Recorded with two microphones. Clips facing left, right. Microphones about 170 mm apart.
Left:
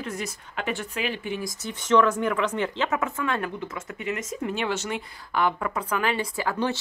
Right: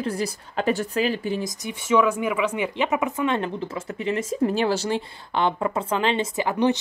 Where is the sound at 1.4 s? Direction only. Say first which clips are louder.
Right 3 dB; 15° right (ahead or behind).